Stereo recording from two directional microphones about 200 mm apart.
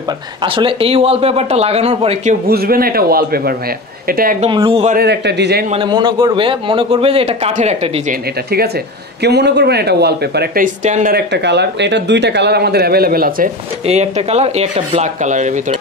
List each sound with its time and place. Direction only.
0.4 s a man's voice: 25° right (ahead or behind)
2.5 s a man's voice: 50° right (ahead or behind)
4.4 s a man's voice: 25° right (ahead or behind)
4.9 s speech: 55° right (ahead or behind)
5.7 s a man's voice: 25° right (ahead or behind)
9.2 s speech: 55° right (ahead or behind); by 11.1 s 40° right (ahead or behind)
11.1 s speech: 60° right (ahead or behind)
13.8 s speech: 35° right (ahead or behind)